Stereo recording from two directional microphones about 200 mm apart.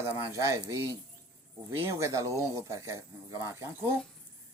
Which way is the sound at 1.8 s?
15° right (ahead or behind).